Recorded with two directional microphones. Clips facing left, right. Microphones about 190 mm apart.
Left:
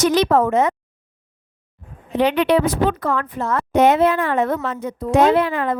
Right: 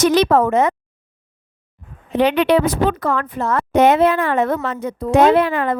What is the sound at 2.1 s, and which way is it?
A woman's voice, 75° right (ahead or behind).